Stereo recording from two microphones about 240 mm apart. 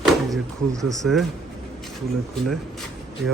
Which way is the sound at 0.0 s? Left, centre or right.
Centre.